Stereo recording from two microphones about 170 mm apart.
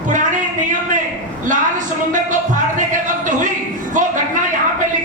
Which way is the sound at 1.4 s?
50° right (ahead or behind).